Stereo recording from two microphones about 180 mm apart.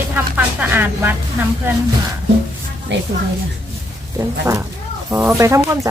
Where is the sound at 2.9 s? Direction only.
75° right (ahead or behind).